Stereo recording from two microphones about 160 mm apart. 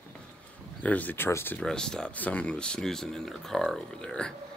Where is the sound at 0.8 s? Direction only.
10° left (ahead or behind).